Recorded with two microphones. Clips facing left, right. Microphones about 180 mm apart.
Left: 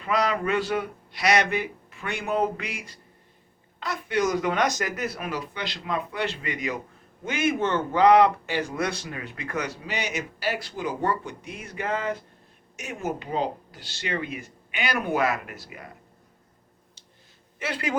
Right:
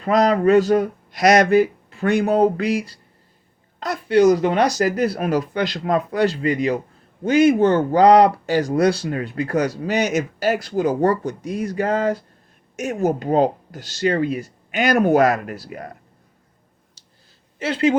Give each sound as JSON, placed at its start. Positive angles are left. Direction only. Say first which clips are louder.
{"t": 0.0, "sound": "speech", "louder": "right 9 dB", "side_deg": -40}
{"t": 17.6, "sound": "a woman's voice", "louder": "right 11 dB", "side_deg": -25}